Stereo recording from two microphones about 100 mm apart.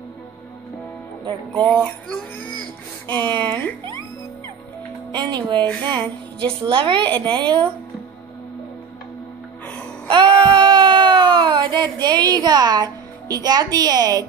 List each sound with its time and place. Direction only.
1.5 s speech: 10° left (ahead or behind)
3.1 s speech: 50° right (ahead or behind)
5.1 s speech: 45° right (ahead or behind)
5.9 s a woman's voice: 60° right (ahead or behind)
10.0 s wail: 55° right (ahead or behind)